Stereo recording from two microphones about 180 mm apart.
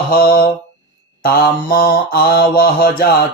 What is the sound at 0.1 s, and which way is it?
Mantra, 55° left (ahead or behind).